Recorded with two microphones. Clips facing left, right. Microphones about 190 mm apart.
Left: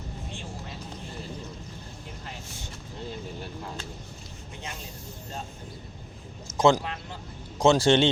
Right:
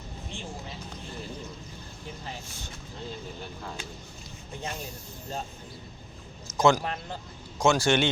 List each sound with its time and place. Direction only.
6.6 s a man's voice: 30° left (ahead or behind)